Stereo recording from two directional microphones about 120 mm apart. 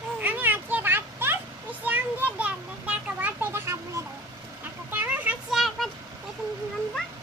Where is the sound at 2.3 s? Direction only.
10° right (ahead or behind).